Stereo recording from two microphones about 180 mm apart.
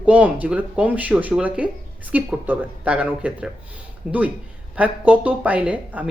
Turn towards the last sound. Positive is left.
turn(degrees=-10)  # may be behind; listen again after turning